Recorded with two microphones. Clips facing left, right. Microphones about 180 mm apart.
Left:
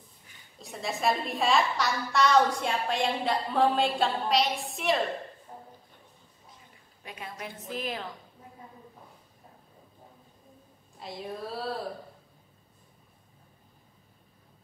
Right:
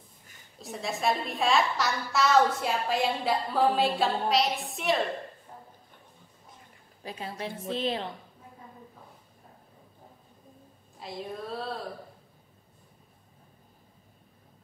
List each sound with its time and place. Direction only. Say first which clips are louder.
0.6 s a woman's voice: even; centre (ahead or behind)
7.0 s a woman's voice: right 4 dB; 30° right (ahead or behind)
11.0 s a woman's voice: even; centre (ahead or behind)